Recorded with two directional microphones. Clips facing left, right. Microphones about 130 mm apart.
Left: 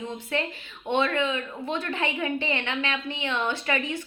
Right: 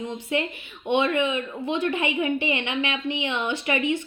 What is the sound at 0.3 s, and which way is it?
A woman's voice, 15° right (ahead or behind).